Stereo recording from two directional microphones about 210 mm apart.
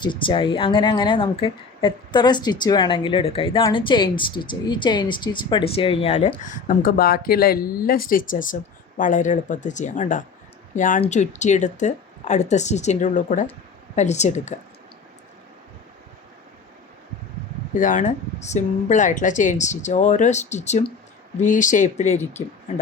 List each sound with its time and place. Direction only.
0.0 s speech: 25° left (ahead or behind)
17.7 s speech: 40° left (ahead or behind)